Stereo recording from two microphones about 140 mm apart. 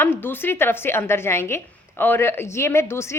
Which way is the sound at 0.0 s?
15° left (ahead or behind).